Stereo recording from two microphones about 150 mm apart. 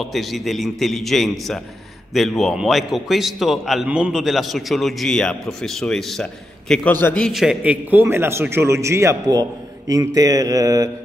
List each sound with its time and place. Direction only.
0.0 s a man's voice: centre (ahead or behind)
7.2 s a man's voice: centre (ahead or behind); by 10.9 s 25° right (ahead or behind)